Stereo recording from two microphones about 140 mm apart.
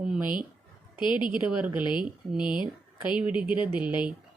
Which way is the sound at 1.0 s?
35° left (ahead or behind).